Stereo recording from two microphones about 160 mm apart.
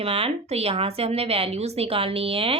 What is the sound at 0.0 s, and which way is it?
A woman's voice, 35° right (ahead or behind).